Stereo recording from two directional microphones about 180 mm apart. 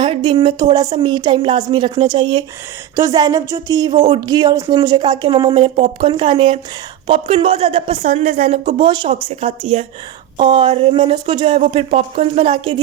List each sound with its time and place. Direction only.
0.0 s speech: 25° right (ahead or behind)